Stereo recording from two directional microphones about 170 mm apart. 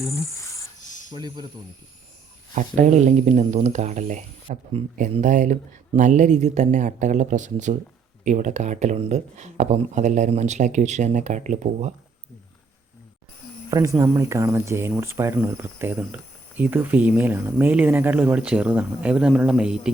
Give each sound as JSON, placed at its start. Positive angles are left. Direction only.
{"t": 0.8, "sound": "a sound", "side_deg": 45}
{"t": 1.1, "sound": "speech", "side_deg": -25}
{"t": 2.6, "sound": "speech", "side_deg": -45}
{"t": 13.7, "sound": "speech", "side_deg": -20}